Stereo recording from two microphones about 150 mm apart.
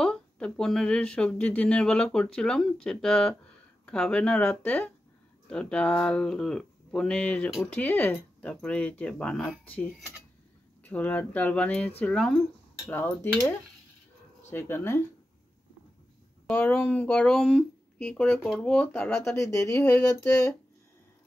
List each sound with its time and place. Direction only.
0.0 s speech: 5° left (ahead or behind)
16.5 s speech: 10° left (ahead or behind)
19.9 s a sound: 20° left (ahead or behind)